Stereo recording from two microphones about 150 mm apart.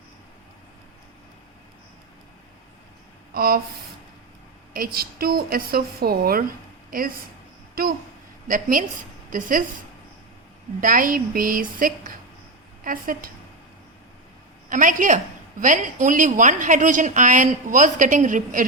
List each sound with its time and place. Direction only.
3.3 s a woman's voice: 90° right
4.7 s a woman's voice: 75° right (ahead or behind)
6.9 s a woman's voice: 70° right (ahead or behind)
7.8 s a child's voice: 80° right
8.4 s a woman's voice: 65° right (ahead or behind)
10.8 s a woman's voice: 65° right (ahead or behind)
14.7 s a woman's voice: 60° right (ahead or behind)